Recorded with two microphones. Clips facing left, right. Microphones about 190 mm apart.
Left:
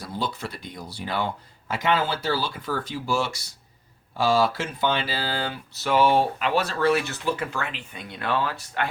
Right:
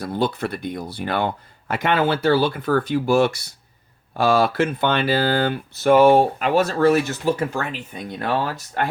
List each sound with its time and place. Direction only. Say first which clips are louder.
0.0 s speech: right 8 dB; 60° right (ahead or behind); by 8.9 s 40° right (ahead or behind)